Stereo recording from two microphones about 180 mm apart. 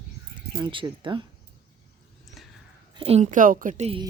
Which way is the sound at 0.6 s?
25° right (ahead or behind).